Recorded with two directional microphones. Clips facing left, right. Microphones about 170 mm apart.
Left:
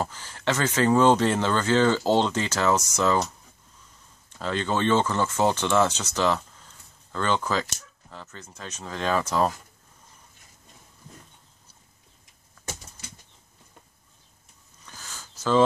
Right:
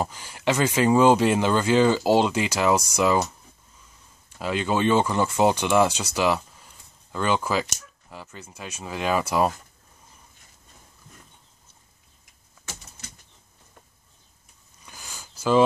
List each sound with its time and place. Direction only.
0.0 s speech: 10° right (ahead or behind)
4.4 s speech: 10° right (ahead or behind)
14.9 s a sound: 15° right (ahead or behind)